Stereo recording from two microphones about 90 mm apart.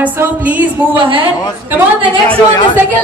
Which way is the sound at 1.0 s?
75° right (ahead or behind).